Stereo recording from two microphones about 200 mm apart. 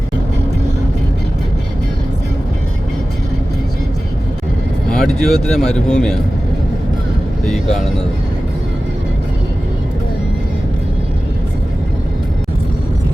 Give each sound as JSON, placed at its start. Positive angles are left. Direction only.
{"t": 4.9, "sound": "speech", "side_deg": 0}
{"t": 7.4, "sound": "speech", "side_deg": 0}